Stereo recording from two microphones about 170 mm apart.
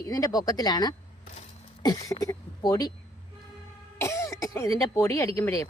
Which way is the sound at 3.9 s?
15° left (ahead or behind).